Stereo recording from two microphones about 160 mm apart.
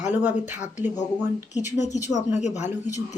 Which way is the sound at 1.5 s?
45° left (ahead or behind).